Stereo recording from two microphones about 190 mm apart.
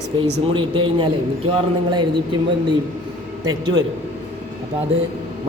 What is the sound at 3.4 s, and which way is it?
Speech, 20° right (ahead or behind).